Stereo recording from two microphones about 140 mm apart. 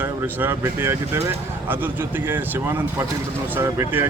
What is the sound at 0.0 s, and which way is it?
A man's voice, 15° right (ahead or behind).